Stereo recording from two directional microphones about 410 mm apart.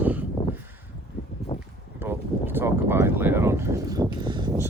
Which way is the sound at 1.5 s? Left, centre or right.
Centre.